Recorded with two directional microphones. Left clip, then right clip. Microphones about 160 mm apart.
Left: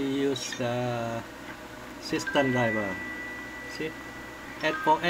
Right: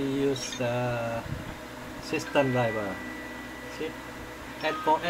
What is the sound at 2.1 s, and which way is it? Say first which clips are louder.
Mantra: even; 25° left (ahead or behind).